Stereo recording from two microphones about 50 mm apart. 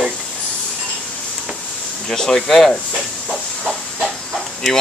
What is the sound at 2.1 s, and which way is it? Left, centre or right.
Speech, centre.